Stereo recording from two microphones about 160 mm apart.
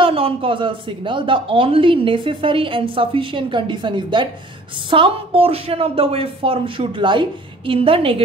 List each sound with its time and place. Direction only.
0.0 s a man's voice: 35° right (ahead or behind)